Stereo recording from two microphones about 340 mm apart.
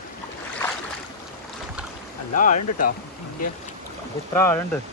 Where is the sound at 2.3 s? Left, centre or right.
Left.